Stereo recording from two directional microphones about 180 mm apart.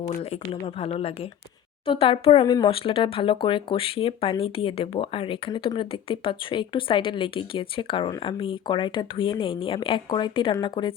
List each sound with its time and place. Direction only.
0.8 s speech: 35° left (ahead or behind)